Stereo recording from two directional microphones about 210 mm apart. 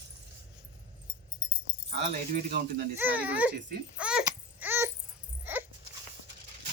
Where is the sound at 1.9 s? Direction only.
35° right (ahead or behind).